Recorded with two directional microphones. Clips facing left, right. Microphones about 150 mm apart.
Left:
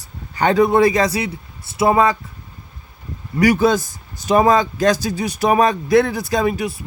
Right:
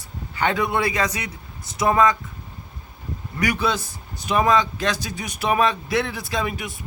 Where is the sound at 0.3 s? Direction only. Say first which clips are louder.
Left 8 dB; 40° left (ahead or behind).